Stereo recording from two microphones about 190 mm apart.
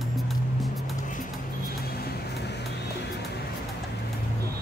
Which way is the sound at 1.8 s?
55° left (ahead or behind).